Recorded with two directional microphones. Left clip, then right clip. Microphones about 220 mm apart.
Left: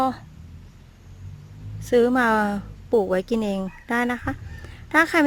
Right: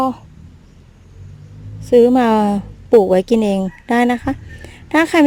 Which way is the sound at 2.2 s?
15° right (ahead or behind).